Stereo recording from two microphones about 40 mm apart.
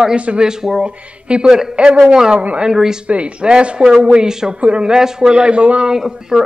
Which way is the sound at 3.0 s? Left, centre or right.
Right.